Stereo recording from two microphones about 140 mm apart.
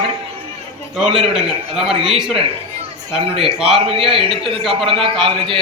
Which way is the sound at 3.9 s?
40° right (ahead or behind).